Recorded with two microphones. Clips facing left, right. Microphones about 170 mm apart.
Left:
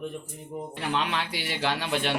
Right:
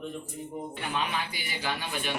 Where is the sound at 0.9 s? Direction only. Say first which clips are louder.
Left 2 dB; 85° left.